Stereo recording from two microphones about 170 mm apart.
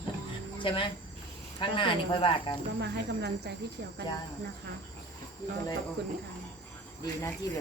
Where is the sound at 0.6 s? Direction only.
30° left (ahead or behind).